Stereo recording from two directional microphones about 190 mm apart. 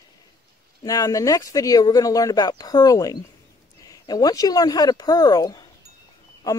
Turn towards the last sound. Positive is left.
turn(degrees=20)  # may be behind; listen again after turning